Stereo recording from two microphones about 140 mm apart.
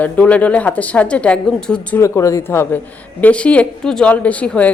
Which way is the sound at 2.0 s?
20° left (ahead or behind).